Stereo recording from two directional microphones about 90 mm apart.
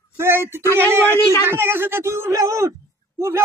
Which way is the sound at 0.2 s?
25° right (ahead or behind).